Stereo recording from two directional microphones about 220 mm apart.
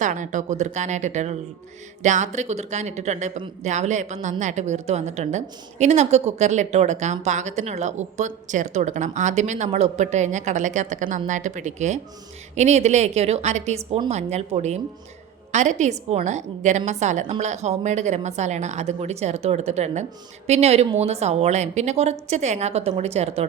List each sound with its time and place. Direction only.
0.0 s a woman's voice: 35° right (ahead or behind)